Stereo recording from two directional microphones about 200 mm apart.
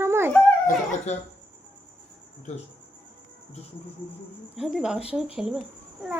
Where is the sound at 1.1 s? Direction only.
35° left (ahead or behind).